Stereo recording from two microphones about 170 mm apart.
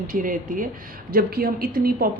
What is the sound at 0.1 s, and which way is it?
A woman's voice, 55° right (ahead or behind).